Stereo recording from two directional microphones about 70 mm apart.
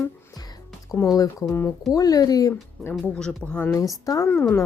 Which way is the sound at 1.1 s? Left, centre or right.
Left.